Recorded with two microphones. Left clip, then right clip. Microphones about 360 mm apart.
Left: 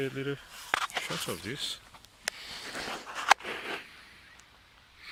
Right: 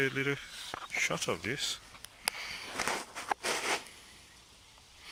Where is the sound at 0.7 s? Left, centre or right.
Left.